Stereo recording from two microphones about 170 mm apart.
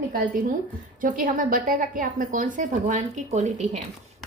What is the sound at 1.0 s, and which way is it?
Speech, 55° right (ahead or behind).